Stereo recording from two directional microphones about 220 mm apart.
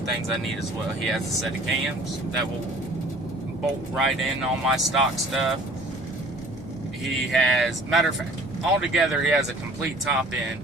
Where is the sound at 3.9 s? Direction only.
Centre (ahead or behind).